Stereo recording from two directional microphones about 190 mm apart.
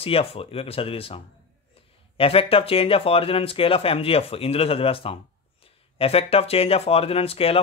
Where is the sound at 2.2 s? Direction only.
30° left (ahead or behind).